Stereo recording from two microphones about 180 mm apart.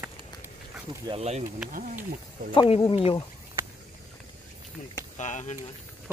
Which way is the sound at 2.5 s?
35° left (ahead or behind).